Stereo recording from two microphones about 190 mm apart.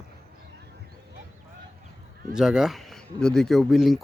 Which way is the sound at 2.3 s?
5° right (ahead or behind).